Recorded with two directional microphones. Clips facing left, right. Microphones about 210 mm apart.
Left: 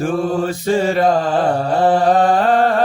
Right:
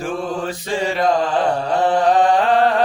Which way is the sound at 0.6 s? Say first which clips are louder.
Left 6 dB; 45° left (ahead or behind).